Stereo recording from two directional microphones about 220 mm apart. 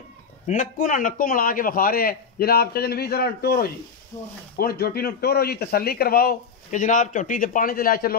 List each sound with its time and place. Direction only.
0.5 s a man's voice: 35° left (ahead or behind)
4.1 s speech: 10° left (ahead or behind)
4.6 s a man's voice: 45° left (ahead or behind)